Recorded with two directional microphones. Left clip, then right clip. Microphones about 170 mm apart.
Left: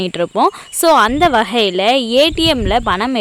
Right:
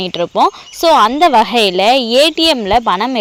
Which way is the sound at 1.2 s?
Centre (ahead or behind).